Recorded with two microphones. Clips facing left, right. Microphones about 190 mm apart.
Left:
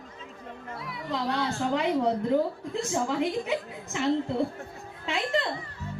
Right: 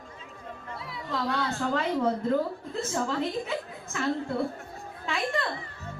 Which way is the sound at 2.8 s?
15° left (ahead or behind).